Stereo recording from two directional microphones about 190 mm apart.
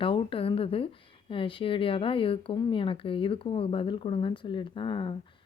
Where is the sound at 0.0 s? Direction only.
30° left (ahead or behind).